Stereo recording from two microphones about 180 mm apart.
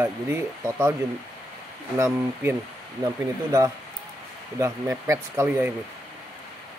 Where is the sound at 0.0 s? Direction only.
15° right (ahead or behind).